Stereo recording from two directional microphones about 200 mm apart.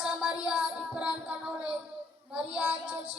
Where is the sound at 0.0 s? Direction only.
5° right (ahead or behind).